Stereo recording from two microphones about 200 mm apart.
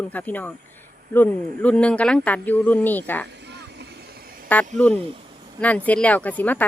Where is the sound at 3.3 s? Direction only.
60° right (ahead or behind).